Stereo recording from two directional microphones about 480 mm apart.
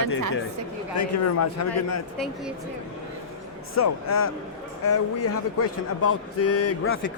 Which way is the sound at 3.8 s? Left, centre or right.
Left.